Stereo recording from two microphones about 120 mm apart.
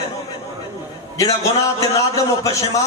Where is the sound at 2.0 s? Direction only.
25° left (ahead or behind).